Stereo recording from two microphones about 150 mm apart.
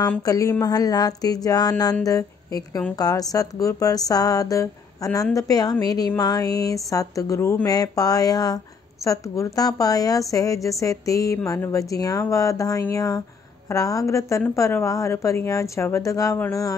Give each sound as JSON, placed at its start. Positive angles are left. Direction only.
{"t": 0.2, "sound": "a woman's voice", "side_deg": 25}